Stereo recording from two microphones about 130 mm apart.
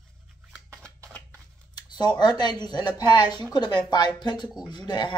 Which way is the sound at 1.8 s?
30° left (ahead or behind).